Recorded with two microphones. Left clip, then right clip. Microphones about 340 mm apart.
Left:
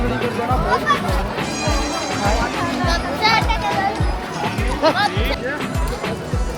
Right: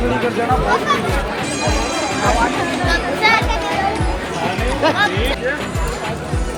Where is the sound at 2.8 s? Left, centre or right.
Left.